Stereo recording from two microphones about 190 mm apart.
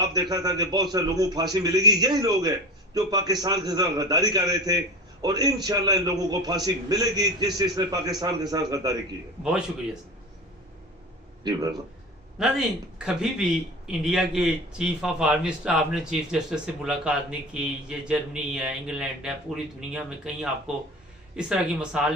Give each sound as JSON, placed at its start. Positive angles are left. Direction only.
{"t": 0.0, "sound": "a man's voice", "side_deg": -20}
{"t": 9.4, "sound": "a man's voice", "side_deg": -5}
{"t": 12.4, "sound": "a man's voice", "side_deg": -5}